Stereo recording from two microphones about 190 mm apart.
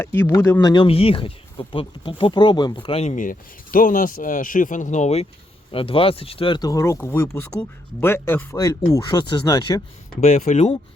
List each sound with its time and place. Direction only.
0.0 s speech: 15° left (ahead or behind)
10.3 s speech: 40° left (ahead or behind)